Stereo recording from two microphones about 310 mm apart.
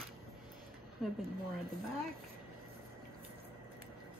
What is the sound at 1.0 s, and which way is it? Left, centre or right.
Speech, centre.